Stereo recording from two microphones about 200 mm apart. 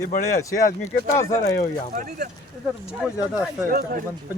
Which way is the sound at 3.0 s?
5° right (ahead or behind).